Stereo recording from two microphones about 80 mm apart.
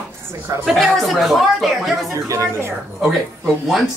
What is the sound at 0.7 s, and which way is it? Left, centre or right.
Speech, centre.